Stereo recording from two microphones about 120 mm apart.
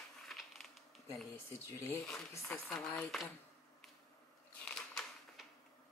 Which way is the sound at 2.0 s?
5° left (ahead or behind).